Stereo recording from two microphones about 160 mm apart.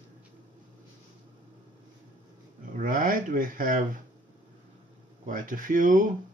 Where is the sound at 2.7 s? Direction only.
55° right (ahead or behind).